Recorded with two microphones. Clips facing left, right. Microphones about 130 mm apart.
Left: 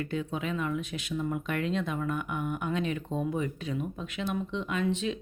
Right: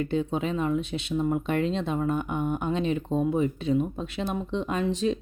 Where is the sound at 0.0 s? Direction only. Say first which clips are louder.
Right 6 dB; 25° right (ahead or behind).